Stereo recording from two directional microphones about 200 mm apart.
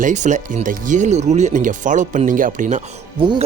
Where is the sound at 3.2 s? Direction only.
25° right (ahead or behind).